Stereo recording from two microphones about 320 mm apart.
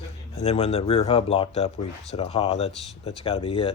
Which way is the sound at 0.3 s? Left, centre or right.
Centre.